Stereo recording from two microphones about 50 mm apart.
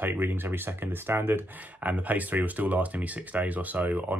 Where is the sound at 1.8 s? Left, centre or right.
Right.